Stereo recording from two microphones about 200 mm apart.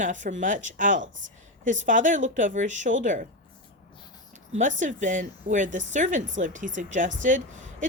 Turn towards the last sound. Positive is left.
turn(degrees=-40)  # may be behind; listen again after turning